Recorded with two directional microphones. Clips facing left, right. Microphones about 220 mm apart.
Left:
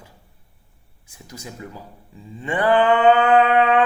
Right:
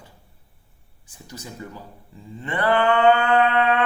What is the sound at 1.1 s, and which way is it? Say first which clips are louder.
Speech: left 1 dB; 10° left (ahead or behind).